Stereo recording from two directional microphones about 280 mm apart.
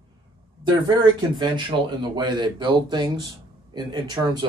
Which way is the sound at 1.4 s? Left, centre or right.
Centre.